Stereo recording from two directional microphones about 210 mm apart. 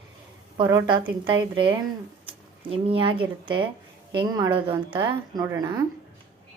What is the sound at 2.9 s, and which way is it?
A woman's voice, 25° right (ahead or behind).